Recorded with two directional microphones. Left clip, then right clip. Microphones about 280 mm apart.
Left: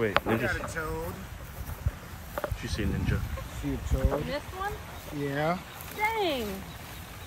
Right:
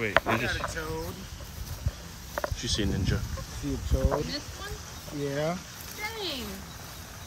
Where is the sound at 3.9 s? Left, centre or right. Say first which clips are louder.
Right 3 dB; centre.